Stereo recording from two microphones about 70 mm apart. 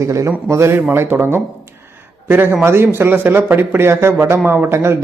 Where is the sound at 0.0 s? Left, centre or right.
Right.